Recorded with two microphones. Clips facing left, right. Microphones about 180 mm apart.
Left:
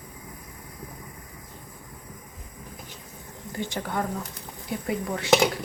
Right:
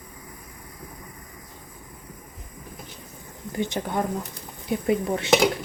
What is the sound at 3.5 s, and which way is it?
Speech, 20° right (ahead or behind).